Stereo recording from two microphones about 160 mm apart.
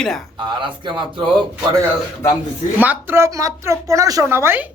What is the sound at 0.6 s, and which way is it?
Speech, 30° right (ahead or behind).